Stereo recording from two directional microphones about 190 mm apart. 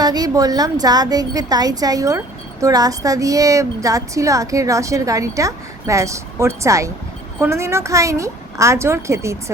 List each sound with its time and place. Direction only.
0.0 s a woman's voice: 20° right (ahead or behind)